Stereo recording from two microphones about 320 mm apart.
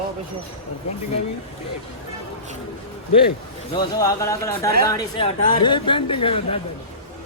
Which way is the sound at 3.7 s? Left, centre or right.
Centre.